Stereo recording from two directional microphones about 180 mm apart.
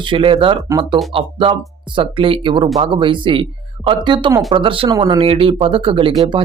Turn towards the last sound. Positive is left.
turn(degrees=-30)  # may be behind; listen again after turning